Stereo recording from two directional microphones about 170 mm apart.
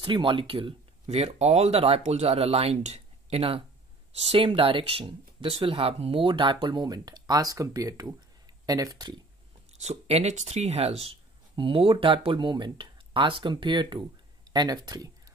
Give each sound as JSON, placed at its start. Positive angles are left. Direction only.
{"t": 0.0, "sound": "speech", "side_deg": -30}
{"t": 9.8, "sound": "speech", "side_deg": -40}